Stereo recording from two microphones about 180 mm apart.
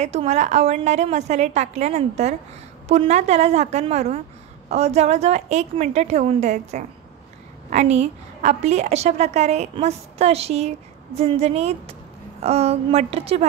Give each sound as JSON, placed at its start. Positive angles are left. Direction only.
{"t": 0.0, "sound": "a woman's voice", "side_deg": -40}